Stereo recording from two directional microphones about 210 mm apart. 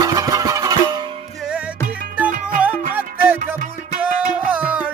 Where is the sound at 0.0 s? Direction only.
15° right (ahead or behind).